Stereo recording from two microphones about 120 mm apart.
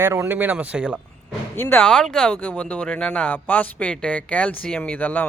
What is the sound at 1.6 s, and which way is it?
Speech, 15° left (ahead or behind).